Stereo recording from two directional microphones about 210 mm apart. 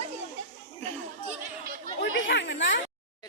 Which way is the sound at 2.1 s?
55° left (ahead or behind).